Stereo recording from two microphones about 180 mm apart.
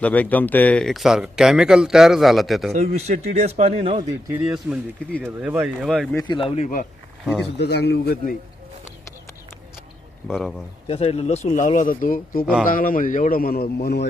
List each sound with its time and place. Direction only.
0.0 s speech: 10° left (ahead or behind)
2.7 s speech: 40° right (ahead or behind)
4.3 s speech: 10° right (ahead or behind)
6.1 s speech: 25° left (ahead or behind)
7.5 s a man's voice: 65° left (ahead or behind)
10.2 s speech: centre (ahead or behind)
10.8 s a man's voice: 35° left (ahead or behind); by 14.1 s 65° left (ahead or behind)